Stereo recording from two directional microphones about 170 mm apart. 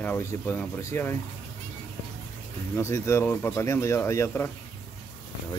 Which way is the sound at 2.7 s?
15° left (ahead or behind).